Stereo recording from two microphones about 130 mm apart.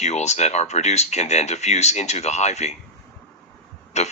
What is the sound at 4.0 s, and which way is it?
Speech, 60° left (ahead or behind).